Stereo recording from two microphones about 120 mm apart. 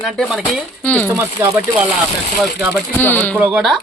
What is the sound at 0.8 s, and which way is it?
Speech, 10° left (ahead or behind).